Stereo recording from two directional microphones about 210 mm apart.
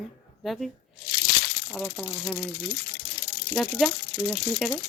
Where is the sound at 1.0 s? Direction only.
50° left (ahead or behind).